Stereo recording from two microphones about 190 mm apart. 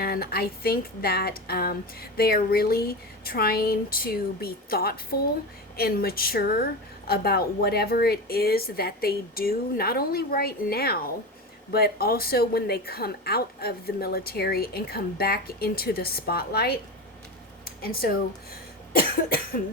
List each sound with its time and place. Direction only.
0.0 s a woman's voice: 55° left (ahead or behind)